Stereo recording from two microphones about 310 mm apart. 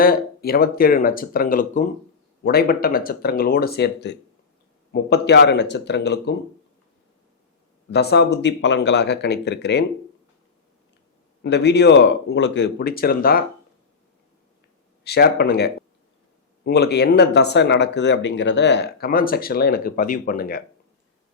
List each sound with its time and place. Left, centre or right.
0.0 s speech: left
7.9 s speech: left
11.4 s speech: left
15.0 s speech: left